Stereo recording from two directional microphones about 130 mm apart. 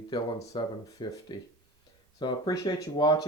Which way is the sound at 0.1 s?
30° left (ahead or behind).